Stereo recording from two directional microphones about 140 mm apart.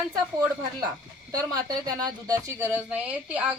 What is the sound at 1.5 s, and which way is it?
Speech, 30° right (ahead or behind).